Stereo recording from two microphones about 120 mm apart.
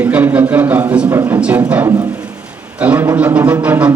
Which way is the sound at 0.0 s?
15° right (ahead or behind).